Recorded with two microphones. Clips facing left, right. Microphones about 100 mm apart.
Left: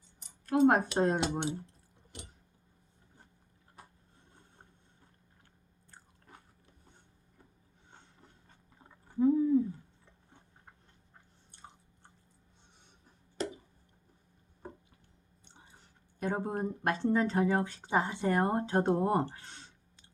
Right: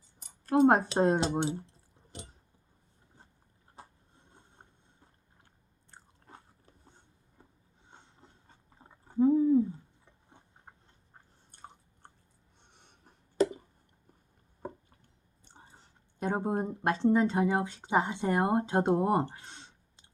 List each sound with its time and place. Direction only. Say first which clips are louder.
0.4 s speech: right 2 dB; 35° right (ahead or behind)
5.9 s biting: right 3 dB; 25° right (ahead or behind)
7.9 s a sound: right 1 dB; 25° right (ahead or behind)
12.7 s a sound: right 3 dB; 60° right (ahead or behind)
15.4 s whispering: right 3 dB; 35° right (ahead or behind)
16.2 s speech: right 2 dB; 25° right (ahead or behind)